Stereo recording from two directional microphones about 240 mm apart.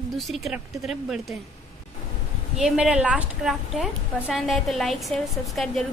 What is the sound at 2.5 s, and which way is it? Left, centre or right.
A woman's voice, centre.